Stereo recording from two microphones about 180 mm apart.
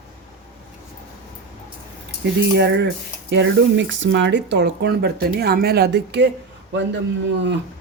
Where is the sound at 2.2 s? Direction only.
70° right (ahead or behind).